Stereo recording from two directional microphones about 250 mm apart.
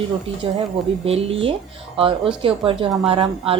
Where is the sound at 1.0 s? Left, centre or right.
Right.